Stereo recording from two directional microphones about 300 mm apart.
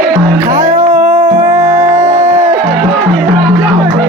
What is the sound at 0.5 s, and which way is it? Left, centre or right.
Music, right.